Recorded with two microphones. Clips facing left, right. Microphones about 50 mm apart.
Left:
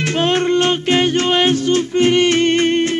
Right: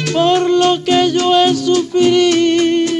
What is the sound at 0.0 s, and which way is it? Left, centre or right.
Music, left.